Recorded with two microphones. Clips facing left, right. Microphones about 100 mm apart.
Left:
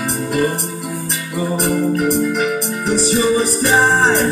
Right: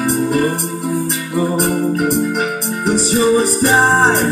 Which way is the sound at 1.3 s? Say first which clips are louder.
Right 2 dB; 35° right (ahead or behind).